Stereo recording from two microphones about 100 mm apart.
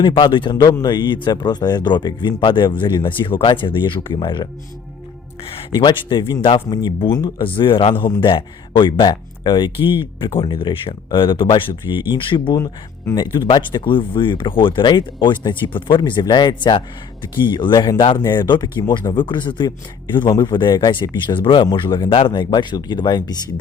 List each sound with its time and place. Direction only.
0.0 s speech: 55° left (ahead or behind)
0.7 s speech: 40° left (ahead or behind)
5.4 s speech: 70° left (ahead or behind)
5.7 s speech: 50° left (ahead or behind)
12.5 s speech: 35° left (ahead or behind)